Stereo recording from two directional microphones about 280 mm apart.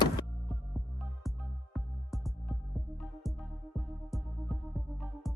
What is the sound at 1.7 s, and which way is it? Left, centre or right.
Music, centre.